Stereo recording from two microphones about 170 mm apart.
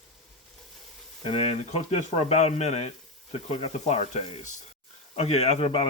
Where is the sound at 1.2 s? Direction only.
40° left (ahead or behind).